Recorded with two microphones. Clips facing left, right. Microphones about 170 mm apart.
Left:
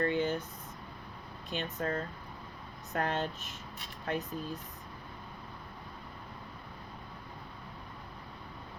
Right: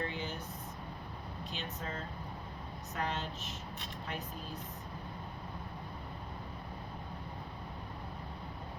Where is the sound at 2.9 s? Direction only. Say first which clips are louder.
Left 5 dB; 50° left (ahead or behind).